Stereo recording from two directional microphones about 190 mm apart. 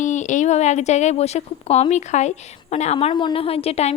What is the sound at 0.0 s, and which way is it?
Speech, 40° left (ahead or behind).